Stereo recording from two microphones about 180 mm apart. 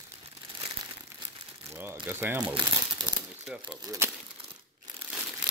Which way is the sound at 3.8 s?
20° right (ahead or behind).